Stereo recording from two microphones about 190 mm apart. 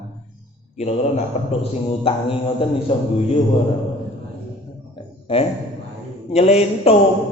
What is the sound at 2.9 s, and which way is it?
Speech, 30° left (ahead or behind).